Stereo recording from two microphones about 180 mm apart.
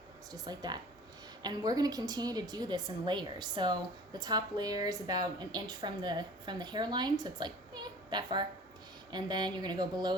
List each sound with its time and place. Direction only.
0.3 s a woman's voice: 20° right (ahead or behind)